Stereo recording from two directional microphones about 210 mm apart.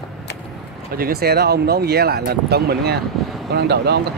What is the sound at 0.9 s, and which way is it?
Speech, 45° right (ahead or behind).